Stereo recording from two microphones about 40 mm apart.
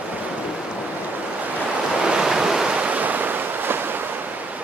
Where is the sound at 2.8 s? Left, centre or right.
Right.